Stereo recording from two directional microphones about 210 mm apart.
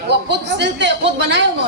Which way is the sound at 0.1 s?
55° right (ahead or behind).